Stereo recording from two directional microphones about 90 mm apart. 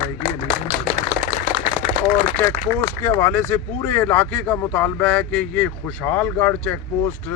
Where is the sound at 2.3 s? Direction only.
30° left (ahead or behind).